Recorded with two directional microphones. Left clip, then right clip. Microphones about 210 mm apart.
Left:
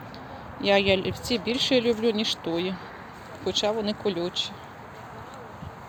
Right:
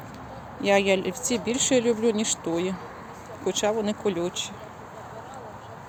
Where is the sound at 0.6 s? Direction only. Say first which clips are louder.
Even; centre (ahead or behind).